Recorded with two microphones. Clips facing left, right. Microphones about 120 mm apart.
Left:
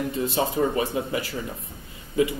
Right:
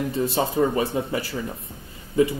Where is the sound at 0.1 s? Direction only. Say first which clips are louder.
Right 2 dB; 30° right (ahead or behind).